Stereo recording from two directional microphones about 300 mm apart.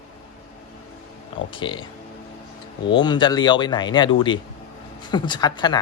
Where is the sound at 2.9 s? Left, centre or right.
Centre.